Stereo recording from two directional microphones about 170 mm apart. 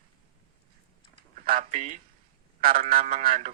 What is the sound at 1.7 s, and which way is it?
Speech, 45° right (ahead or behind).